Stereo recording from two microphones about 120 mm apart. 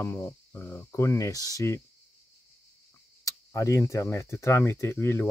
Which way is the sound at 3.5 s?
25° left (ahead or behind).